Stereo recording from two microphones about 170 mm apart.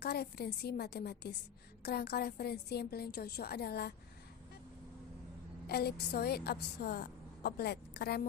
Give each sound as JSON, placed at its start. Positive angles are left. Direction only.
{"t": 0.0, "sound": "a woman's voice", "side_deg": 70}
{"t": 5.6, "sound": "a woman's voice", "side_deg": 70}